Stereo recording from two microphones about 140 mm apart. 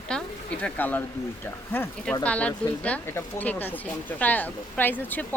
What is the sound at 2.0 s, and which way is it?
Speech, 10° left (ahead or behind).